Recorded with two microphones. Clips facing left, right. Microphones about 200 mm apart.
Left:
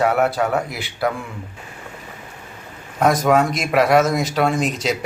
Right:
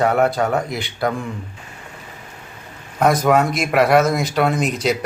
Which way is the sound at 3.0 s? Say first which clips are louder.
Even; centre (ahead or behind).